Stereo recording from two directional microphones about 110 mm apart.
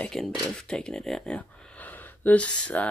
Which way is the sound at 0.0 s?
5° left (ahead or behind).